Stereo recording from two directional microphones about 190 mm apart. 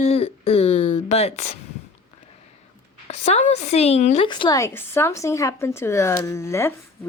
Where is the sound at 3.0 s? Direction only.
35° left (ahead or behind).